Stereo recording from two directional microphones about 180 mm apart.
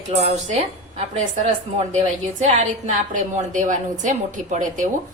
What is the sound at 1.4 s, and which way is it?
A woman's voice, 40° right (ahead or behind).